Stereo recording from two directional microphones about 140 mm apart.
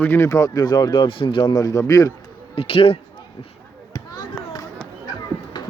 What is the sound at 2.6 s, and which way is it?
Speech, 40° left (ahead or behind).